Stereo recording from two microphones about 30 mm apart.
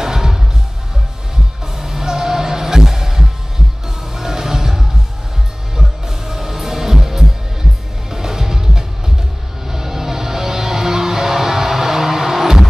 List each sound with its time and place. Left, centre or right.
0.0 s music: centre
1.8 s music: centre